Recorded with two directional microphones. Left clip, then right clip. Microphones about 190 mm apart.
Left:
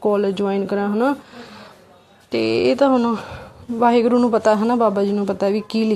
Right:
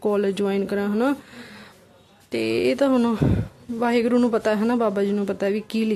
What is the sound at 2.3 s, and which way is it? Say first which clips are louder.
Speech: left 4 dB; 10° right (ahead or behind).